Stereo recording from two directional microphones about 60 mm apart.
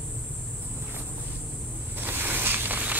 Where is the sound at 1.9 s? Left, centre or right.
Right.